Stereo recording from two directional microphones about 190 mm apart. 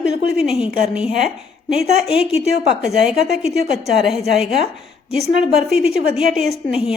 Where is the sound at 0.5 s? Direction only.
30° left (ahead or behind).